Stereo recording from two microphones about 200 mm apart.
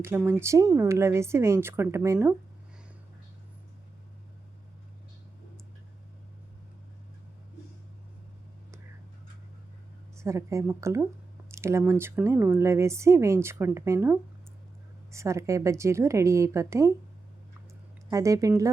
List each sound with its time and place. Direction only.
0.0 s a woman's voice: 10° right (ahead or behind)
10.2 s a woman's voice: 15° right (ahead or behind)
18.1 s a woman's voice: 15° right (ahead or behind)